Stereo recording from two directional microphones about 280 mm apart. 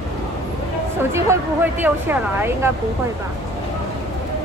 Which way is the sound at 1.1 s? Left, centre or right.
Centre.